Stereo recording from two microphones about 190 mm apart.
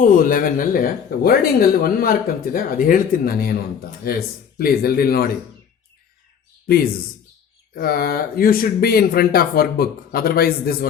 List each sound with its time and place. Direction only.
0.0 s speech: 45° left (ahead or behind)
7.8 s speech: 50° left (ahead or behind)